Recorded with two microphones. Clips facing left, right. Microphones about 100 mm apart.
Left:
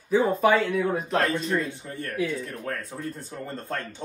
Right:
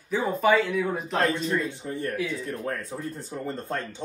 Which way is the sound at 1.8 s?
15° right (ahead or behind).